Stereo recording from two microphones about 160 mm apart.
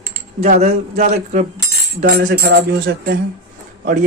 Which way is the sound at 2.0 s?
80° right.